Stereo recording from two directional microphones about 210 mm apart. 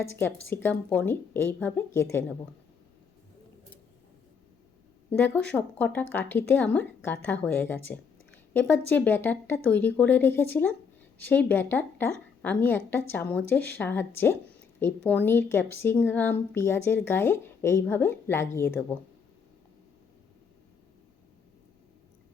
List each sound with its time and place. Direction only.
0.5 s speech: 10° left (ahead or behind)
5.1 s speech: 10° left (ahead or behind)
7.9 s a sound: 5° left (ahead or behind)
8.9 s speech: 10° left (ahead or behind)